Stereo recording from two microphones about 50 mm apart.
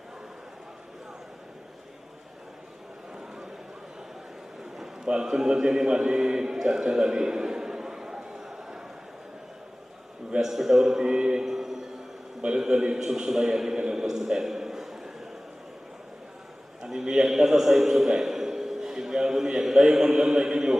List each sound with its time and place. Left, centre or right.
3.2 s a sound: centre
5.0 s a man's voice: centre
10.4 s a man's voice: centre
16.8 s a man's voice: centre